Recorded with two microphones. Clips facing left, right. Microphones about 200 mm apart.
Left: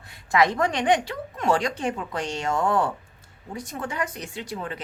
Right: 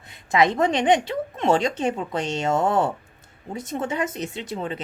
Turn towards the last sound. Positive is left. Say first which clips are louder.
# right 3 dB
turn(degrees=-25)  # may be behind; listen again after turning